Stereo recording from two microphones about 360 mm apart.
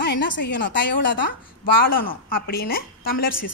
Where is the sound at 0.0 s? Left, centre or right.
Left.